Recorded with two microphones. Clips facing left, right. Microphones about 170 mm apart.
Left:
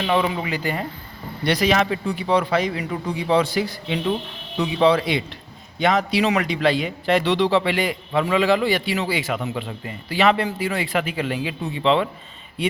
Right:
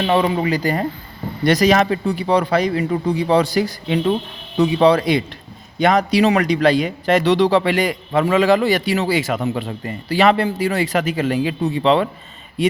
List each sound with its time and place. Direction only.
0.0 s a man's voice: 35° right (ahead or behind)